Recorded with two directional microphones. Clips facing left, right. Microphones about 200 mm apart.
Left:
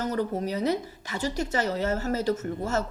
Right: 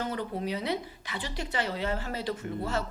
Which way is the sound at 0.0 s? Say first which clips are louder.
Left 5 dB; 40° left (ahead or behind).